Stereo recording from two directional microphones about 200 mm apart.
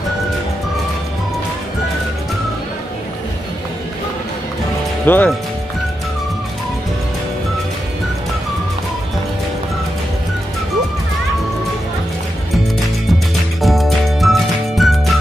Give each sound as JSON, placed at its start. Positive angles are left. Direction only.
{"t": 5.0, "sound": "speech", "side_deg": 10}
{"t": 13.6, "sound": "music", "side_deg": 0}